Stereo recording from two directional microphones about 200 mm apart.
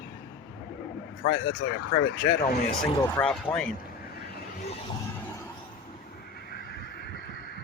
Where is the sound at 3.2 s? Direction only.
5° left (ahead or behind).